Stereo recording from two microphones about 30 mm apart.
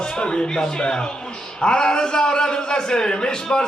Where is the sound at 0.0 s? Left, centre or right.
Left.